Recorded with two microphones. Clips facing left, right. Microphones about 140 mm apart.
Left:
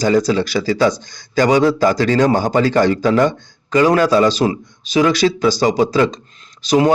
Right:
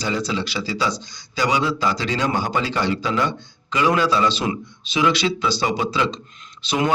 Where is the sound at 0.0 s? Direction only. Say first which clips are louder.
Left 9 dB; 45° left (ahead or behind).